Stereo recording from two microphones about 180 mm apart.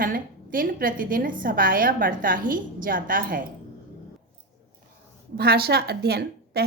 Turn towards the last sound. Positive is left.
turn(degrees=-60)  # may be behind; listen again after turning